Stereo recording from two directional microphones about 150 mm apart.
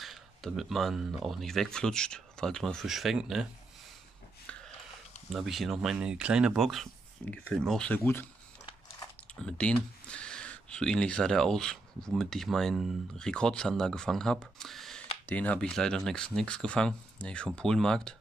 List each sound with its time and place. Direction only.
0.0 s speech: centre (ahead or behind)
4.5 s biting: 5° left (ahead or behind)
5.3 s speech: centre (ahead or behind)
8.0 s speech: 15° left (ahead or behind)
9.3 s speech: 5° left (ahead or behind)